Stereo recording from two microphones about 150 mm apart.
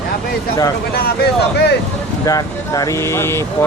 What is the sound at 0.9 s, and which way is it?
Speech, 90° left.